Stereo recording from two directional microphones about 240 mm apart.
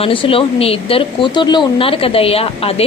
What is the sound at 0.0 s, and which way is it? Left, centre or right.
A woman's voice, left.